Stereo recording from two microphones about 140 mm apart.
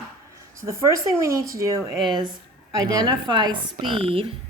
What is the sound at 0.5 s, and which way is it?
Speech, 20° right (ahead or behind).